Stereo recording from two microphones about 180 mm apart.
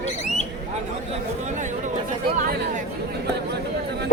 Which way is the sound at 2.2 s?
55° right (ahead or behind).